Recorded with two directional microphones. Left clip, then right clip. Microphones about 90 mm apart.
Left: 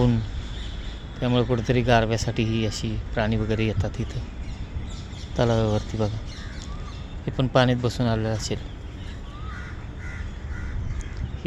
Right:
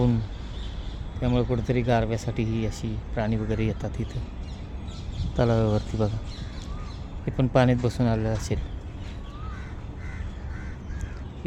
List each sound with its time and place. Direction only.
1.2 s speech: 5° right (ahead or behind)
5.4 s speech: 30° right (ahead or behind)
7.4 s speech: 35° right (ahead or behind)